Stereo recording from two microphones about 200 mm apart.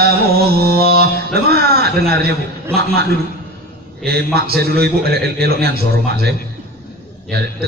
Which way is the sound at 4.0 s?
50° right (ahead or behind).